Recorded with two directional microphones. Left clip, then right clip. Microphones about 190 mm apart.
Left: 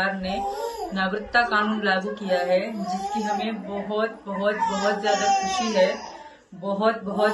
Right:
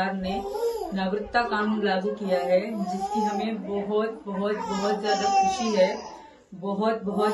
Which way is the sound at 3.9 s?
Centre (ahead or behind).